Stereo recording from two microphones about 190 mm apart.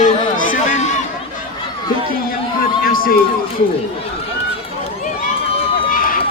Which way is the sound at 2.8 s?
50° left (ahead or behind).